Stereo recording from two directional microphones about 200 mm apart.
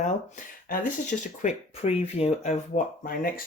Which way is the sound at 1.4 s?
35° left (ahead or behind).